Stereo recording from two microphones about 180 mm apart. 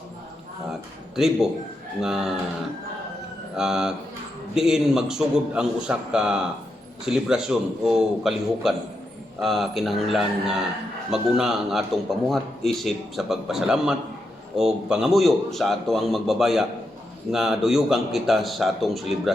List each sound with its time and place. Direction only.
0.7 s a man's voice: centre (ahead or behind)
3.5 s a man's voice: 5° right (ahead or behind)